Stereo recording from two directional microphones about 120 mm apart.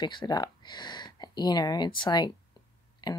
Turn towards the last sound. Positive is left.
turn(degrees=35)  # may be behind; listen again after turning